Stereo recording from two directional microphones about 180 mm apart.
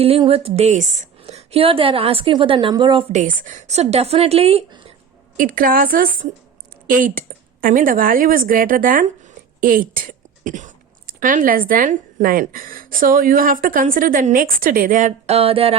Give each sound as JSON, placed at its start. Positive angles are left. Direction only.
{"t": 0.0, "sound": "a woman's voice", "side_deg": -35}
{"t": 3.1, "sound": "a woman's voice", "side_deg": -45}
{"t": 5.4, "sound": "a woman's voice", "side_deg": -50}